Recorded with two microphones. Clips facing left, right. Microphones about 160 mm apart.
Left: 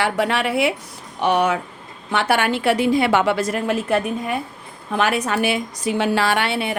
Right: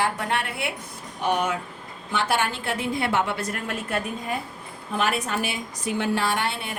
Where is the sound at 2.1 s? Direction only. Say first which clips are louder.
Left 6 dB; 65° left (ahead or behind); by 4.3 s 90° left.